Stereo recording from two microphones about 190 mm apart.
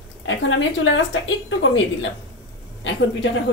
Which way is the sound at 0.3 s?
80° left.